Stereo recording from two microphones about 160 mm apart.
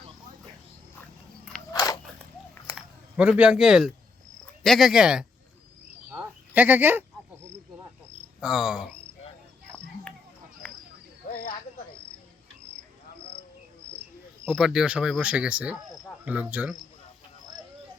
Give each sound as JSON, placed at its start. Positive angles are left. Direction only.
{"t": 1.7, "sound": "biting", "side_deg": 25}
{"t": 2.7, "sound": "speech", "side_deg": -5}
{"t": 6.1, "sound": "a sound", "side_deg": -10}
{"t": 8.4, "sound": "speech", "side_deg": -5}
{"t": 10.6, "sound": "a sound", "side_deg": 5}
{"t": 14.5, "sound": "speech", "side_deg": 0}